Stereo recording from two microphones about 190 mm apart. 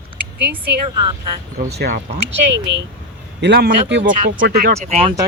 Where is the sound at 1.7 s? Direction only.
55° right (ahead or behind).